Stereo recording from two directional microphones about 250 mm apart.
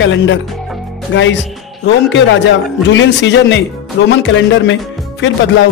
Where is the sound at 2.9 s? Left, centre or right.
Left.